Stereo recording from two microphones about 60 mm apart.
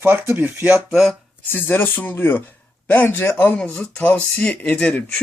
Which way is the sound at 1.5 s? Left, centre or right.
Left.